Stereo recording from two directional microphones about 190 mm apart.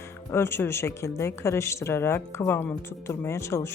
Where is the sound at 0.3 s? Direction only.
15° left (ahead or behind).